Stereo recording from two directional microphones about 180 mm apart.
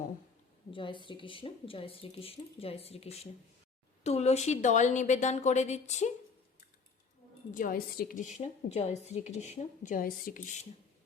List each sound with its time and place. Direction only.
0.7 s a woman's voice: 25° left (ahead or behind)
7.5 s a woman's voice: 50° left (ahead or behind)